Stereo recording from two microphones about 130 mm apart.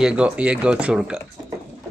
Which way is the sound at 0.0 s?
10° right (ahead or behind).